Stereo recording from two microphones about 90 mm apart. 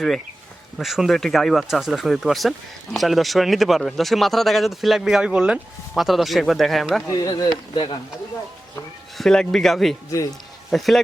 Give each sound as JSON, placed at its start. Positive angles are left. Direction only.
{"t": 0.8, "sound": "speech", "side_deg": -5}
{"t": 7.1, "sound": "speech", "side_deg": 45}
{"t": 9.1, "sound": "speech", "side_deg": 5}